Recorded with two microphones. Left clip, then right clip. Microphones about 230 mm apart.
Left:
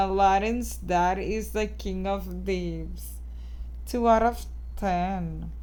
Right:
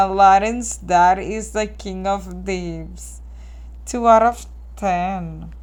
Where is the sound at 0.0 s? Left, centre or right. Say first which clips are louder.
Right 9 dB; centre.